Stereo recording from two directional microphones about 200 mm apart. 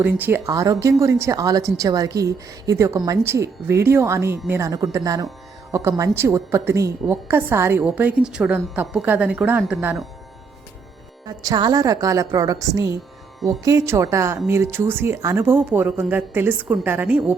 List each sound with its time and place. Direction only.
0.0 s a woman's voice: 10° right (ahead or behind)
11.3 s a woman's voice: 20° right (ahead or behind)